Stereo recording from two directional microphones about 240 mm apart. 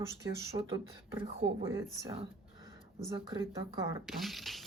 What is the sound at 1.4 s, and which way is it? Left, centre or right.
Speech, right.